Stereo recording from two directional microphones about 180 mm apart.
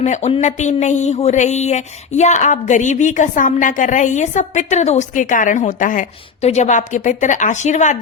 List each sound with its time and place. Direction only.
0.0 s speech: 40° left (ahead or behind)